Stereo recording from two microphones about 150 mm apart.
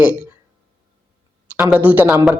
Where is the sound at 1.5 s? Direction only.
15° right (ahead or behind).